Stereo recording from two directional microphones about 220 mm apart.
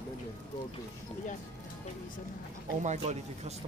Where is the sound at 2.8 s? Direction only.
30° right (ahead or behind).